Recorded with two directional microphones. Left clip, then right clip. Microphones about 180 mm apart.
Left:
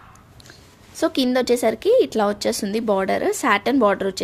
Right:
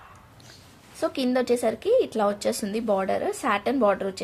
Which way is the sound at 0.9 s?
50° left (ahead or behind).